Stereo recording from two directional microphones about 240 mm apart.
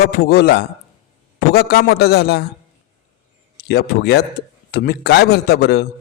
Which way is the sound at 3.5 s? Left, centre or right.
Left.